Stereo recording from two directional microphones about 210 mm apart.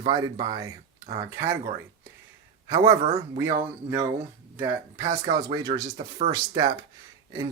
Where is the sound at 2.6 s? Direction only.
15° right (ahead or behind).